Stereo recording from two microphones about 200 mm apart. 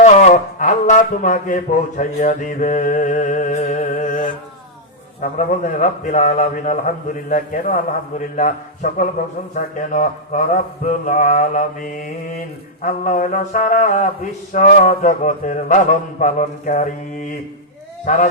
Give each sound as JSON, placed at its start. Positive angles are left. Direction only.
{"t": 0.0, "sound": "speech", "side_deg": 35}
{"t": 12.8, "sound": "speech", "side_deg": 40}
{"t": 18.0, "sound": "speech", "side_deg": 40}